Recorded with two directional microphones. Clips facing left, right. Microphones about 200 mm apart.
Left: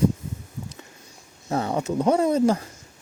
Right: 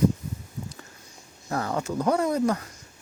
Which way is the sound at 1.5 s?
25° left (ahead or behind).